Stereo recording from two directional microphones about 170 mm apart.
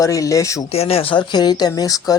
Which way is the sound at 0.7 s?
35° left (ahead or behind).